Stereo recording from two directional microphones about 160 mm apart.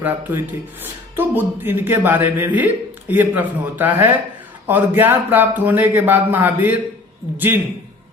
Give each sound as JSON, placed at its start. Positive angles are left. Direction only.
{"t": 0.0, "sound": "speech", "side_deg": -15}